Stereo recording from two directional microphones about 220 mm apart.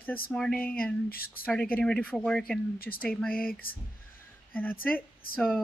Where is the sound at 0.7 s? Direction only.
40° left (ahead or behind).